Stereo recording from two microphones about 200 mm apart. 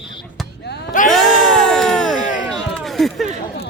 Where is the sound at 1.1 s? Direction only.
Centre (ahead or behind).